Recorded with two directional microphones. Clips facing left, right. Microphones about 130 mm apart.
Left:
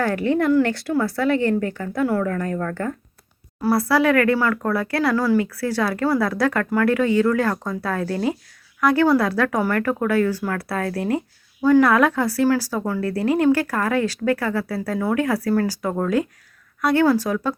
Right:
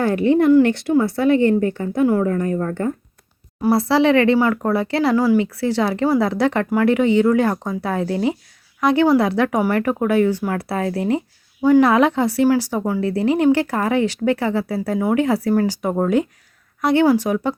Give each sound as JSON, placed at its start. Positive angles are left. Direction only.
{"t": 0.0, "sound": "speech", "side_deg": -20}